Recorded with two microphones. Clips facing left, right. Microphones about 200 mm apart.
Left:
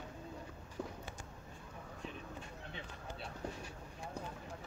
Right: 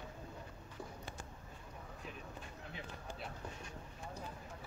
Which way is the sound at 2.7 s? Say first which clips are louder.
Right 1 dB; 30° left (ahead or behind).